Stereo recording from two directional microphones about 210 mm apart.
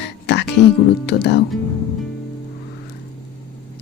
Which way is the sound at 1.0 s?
50° left (ahead or behind).